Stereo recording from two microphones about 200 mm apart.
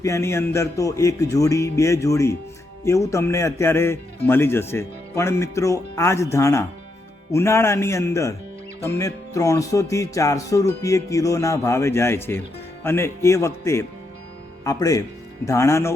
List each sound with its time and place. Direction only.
0.0 s a man's voice: 15° left (ahead or behind)